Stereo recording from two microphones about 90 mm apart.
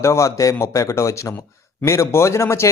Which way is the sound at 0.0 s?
35° left (ahead or behind).